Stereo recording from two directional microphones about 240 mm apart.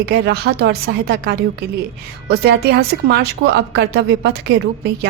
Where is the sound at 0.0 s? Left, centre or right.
Right.